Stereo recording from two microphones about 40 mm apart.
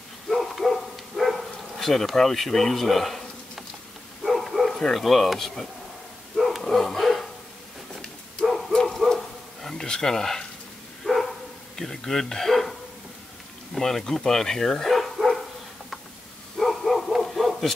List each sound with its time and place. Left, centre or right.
0.3 s bow-wow: centre
4.7 s speech: centre
5.0 s speech: centre
6.3 s bow-wow: centre
6.6 s dog: centre
8.4 s bow-wow: left
8.8 s dog: centre
9.1 s bow-wow: centre
9.8 s speech: centre
11.1 s dog: centre
11.7 s speech: centre
13.7 s speech: centre
16.5 s bow-wow: centre